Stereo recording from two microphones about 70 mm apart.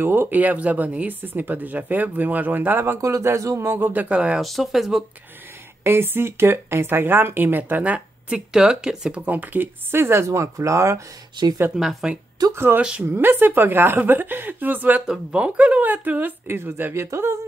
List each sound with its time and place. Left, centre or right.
0.0 s speech: right
3.0 s speech: right
3.9 s speech: centre
4.4 s speech: centre
5.9 s speech: right
8.5 s speech: centre; by 11.0 s right
11.7 s speech: centre
12.5 s speech: right
17.0 s speech: right